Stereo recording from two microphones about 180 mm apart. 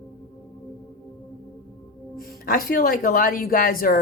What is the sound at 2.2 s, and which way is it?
A woman's voice, 55° left (ahead or behind).